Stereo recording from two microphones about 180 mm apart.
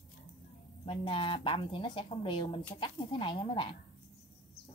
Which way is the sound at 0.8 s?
30° left (ahead or behind).